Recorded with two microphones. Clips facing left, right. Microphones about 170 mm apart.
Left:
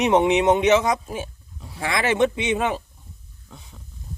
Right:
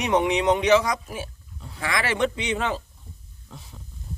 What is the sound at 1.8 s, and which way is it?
Speech, 25° left (ahead or behind).